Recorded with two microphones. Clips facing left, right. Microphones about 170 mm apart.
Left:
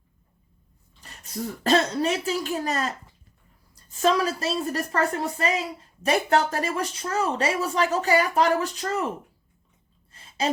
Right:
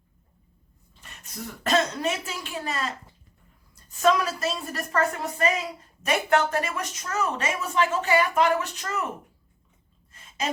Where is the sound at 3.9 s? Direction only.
30° left (ahead or behind).